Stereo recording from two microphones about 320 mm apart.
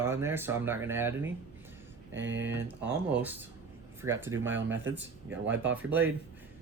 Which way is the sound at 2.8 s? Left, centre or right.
Centre.